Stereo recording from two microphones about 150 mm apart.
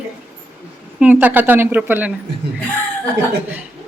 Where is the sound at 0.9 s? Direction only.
10° right (ahead or behind).